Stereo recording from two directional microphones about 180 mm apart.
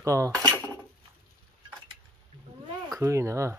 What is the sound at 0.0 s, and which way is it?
Speech, 15° right (ahead or behind).